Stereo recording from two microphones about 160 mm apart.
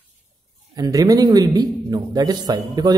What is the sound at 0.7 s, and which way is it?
Speech, 25° right (ahead or behind).